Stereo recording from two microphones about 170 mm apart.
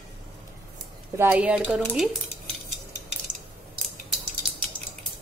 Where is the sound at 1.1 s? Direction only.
10° right (ahead or behind).